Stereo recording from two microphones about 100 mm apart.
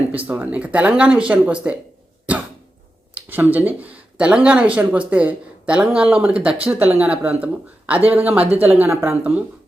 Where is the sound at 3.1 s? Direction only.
20° right (ahead or behind).